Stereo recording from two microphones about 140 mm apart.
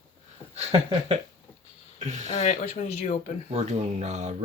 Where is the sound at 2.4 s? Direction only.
60° left (ahead or behind).